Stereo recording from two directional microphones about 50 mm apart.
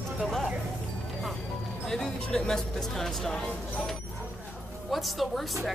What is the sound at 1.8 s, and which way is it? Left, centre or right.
Speech, centre.